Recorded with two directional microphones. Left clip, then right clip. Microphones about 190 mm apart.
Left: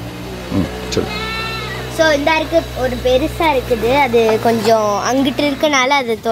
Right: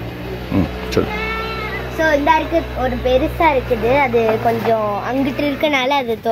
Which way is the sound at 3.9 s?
55° left (ahead or behind).